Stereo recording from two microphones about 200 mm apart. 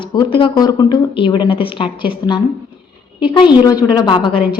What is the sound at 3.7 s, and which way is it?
Speech, 20° left (ahead or behind).